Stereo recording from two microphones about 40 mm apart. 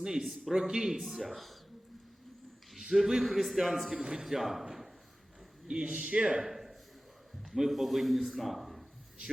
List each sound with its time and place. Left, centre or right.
0.0 s speech: centre
0.3 s a man's voice: centre
0.5 s speech: centre
3.2 s a man's voice: centre
5.6 s speech: right
6.4 s a sound: centre
7.5 s a man's voice: centre